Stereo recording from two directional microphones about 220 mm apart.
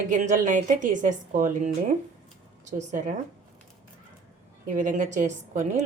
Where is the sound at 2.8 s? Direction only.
35° right (ahead or behind).